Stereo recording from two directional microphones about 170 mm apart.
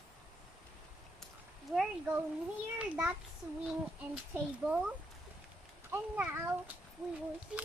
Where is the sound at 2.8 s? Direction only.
5° right (ahead or behind).